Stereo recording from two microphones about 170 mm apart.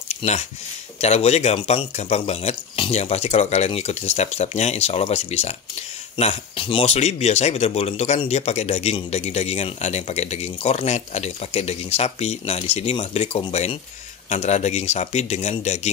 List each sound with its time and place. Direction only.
0.1 s speech: 40° left (ahead or behind)